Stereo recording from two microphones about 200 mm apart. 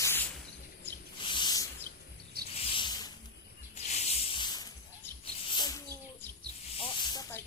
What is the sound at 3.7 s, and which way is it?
Snake, 35° left (ahead or behind).